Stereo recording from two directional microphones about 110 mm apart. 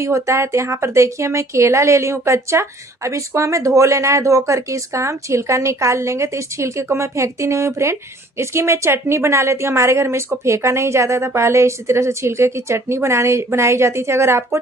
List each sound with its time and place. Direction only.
0.0 s speech: 25° right (ahead or behind)